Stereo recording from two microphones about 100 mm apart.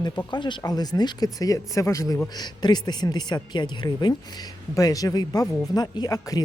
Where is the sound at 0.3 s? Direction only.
50° left (ahead or behind); by 2.2 s 30° left (ahead or behind).